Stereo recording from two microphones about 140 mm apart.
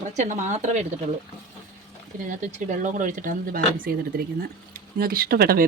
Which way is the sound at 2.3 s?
60° right (ahead or behind).